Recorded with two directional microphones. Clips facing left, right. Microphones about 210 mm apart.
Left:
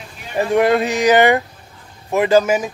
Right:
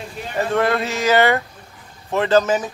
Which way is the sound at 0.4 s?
15° left (ahead or behind).